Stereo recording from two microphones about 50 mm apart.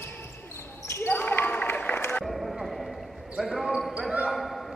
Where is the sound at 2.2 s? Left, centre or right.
Centre.